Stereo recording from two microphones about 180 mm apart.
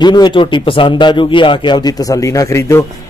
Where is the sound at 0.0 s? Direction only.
25° left (ahead or behind).